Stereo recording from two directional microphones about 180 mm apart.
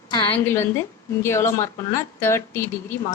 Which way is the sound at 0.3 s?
10° left (ahead or behind).